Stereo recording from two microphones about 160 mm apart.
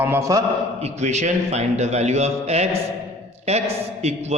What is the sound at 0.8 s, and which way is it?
A man's voice, 45° right (ahead or behind).